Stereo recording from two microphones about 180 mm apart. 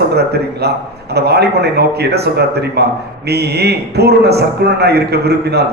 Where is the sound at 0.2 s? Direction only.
65° right (ahead or behind).